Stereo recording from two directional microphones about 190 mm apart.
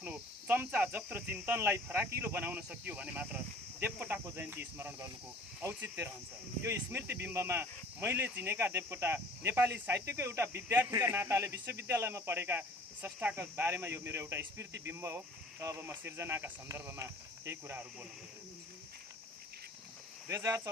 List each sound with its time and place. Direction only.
0.0 s speech: 10° right (ahead or behind)
20.2 s speech: 15° right (ahead or behind)